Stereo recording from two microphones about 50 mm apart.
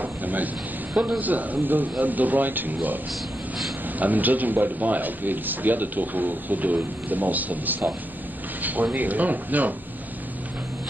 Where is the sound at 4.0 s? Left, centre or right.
Right.